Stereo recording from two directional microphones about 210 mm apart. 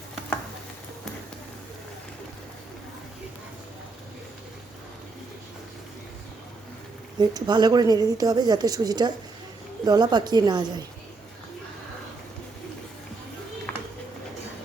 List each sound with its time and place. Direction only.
7.2 s speech: 20° right (ahead or behind)